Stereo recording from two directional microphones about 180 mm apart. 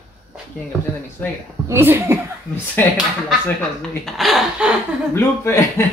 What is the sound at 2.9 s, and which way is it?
Speech, centre (ahead or behind).